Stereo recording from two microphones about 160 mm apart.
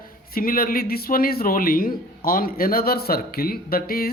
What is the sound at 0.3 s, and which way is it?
A man's voice, 65° left (ahead or behind).